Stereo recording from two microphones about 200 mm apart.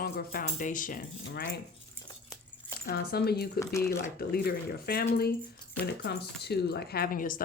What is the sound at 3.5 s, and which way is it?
Speech, 15° left (ahead or behind).